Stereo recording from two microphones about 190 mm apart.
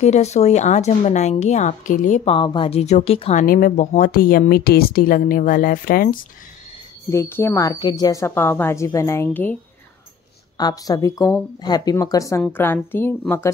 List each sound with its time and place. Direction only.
0.0 s a woman's voice: 35° left (ahead or behind)
2.3 s a woman's voice: 25° left (ahead or behind)
3.4 s speech: 50° left (ahead or behind)
7.1 s a woman's voice: 15° left (ahead or behind)
10.6 s a woman's voice: 20° left (ahead or behind)